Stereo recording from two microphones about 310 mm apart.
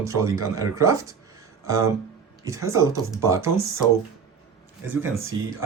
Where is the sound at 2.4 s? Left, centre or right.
Centre.